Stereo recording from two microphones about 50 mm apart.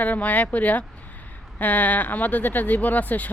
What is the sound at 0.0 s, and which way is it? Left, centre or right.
Speech, left.